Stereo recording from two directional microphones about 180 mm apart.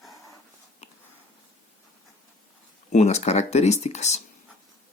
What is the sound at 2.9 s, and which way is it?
Speech, 40° left (ahead or behind).